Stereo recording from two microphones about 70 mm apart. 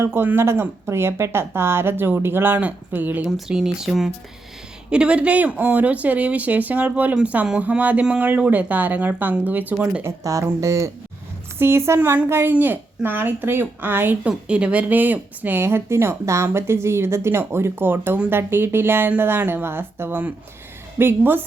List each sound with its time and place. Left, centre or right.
0.0 s speech: right
3.2 s speech: centre
4.9 s speech: centre
10.0 s speech: right
11.6 s speech: right
14.3 s speech: centre; by 21.4 s right